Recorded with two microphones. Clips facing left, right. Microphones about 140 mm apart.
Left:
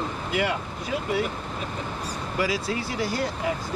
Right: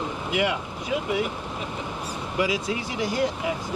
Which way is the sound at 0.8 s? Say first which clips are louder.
Right 1 dB; 10° right (ahead or behind).